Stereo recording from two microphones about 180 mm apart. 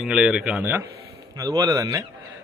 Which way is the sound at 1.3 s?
20° right (ahead or behind).